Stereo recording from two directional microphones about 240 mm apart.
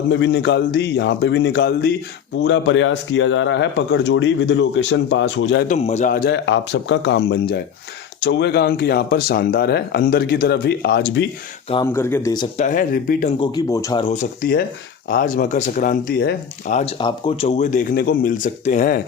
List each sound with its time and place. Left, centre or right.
0.1 s speech: left
5.6 s speech: left
11.9 s speech: centre
12.5 s speech: left
13.4 s speech: centre; by 19.0 s left